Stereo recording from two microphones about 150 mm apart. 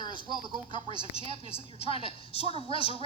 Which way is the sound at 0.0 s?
30° left (ahead or behind).